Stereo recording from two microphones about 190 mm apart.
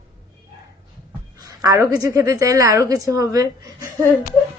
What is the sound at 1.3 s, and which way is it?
A woman's voice, 20° right (ahead or behind).